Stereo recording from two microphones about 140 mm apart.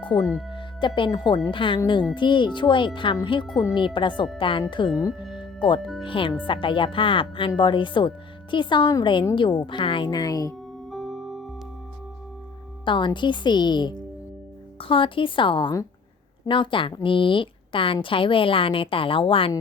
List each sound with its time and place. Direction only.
0.0 s a woman's voice: 35° left (ahead or behind)
3.5 s speech: 25° left (ahead or behind)
3.8 s a woman's voice: 35° left (ahead or behind)
5.4 s music: 35° left (ahead or behind)
6.0 s a woman's voice: 40° left (ahead or behind)
10.9 s music: centre (ahead or behind)
12.8 s a woman's voice: 35° left (ahead or behind)